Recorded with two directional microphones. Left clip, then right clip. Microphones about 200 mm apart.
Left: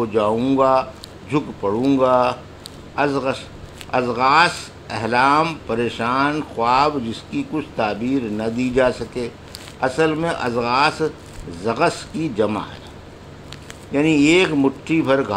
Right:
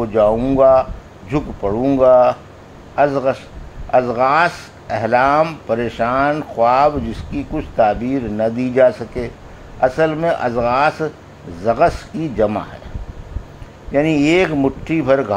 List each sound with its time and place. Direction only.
0.0 s speech: 20° right (ahead or behind)
13.9 s speech: 25° right (ahead or behind)